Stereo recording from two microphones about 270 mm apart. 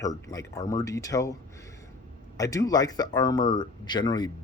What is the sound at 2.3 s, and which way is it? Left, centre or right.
Speech, centre.